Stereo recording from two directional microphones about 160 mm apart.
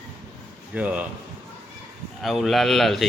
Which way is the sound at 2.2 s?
Centre (ahead or behind).